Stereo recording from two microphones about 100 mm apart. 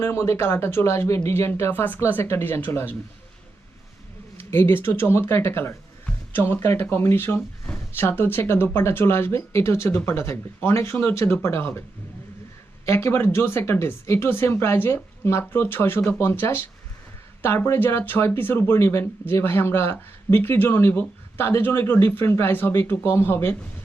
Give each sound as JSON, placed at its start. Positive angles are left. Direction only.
{"t": 0.0, "sound": "speech", "side_deg": 25}
{"t": 4.4, "sound": "speech", "side_deg": 25}
{"t": 12.8, "sound": "speech", "side_deg": 25}